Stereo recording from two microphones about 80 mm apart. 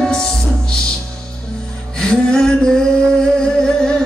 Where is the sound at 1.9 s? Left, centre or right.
Centre.